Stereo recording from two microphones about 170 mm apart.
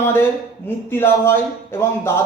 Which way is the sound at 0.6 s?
15° left (ahead or behind).